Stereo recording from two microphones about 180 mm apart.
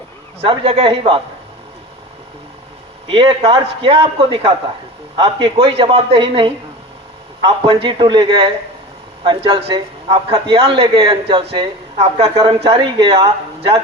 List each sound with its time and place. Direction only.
0.4 s a man's voice: 30° right (ahead or behind)
3.1 s a man's voice: 25° right (ahead or behind)